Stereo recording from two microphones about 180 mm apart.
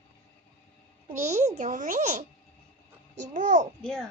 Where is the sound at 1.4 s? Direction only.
40° right (ahead or behind).